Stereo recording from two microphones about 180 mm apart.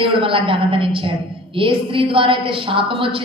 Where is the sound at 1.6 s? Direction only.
30° right (ahead or behind).